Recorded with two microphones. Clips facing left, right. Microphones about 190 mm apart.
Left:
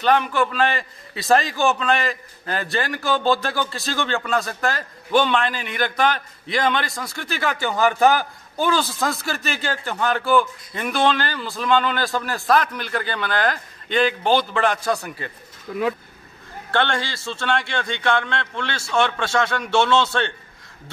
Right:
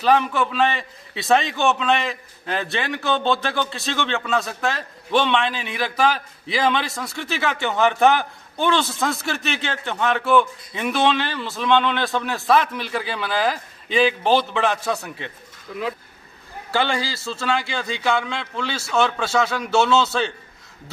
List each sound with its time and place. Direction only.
0.0 s a man's voice: centre (ahead or behind)
15.7 s speech: 50° left (ahead or behind)
16.7 s a man's voice: 5° right (ahead or behind)